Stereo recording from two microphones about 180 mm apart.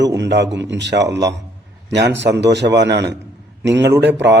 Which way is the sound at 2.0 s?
70° right (ahead or behind).